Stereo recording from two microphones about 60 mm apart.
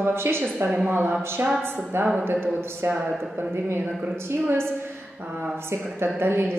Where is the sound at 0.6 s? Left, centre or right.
Centre.